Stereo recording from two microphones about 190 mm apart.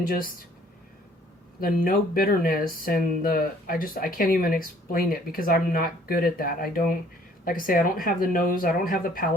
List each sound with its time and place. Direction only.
0.1 s speech: 50° left (ahead or behind)
1.6 s speech: 50° left (ahead or behind)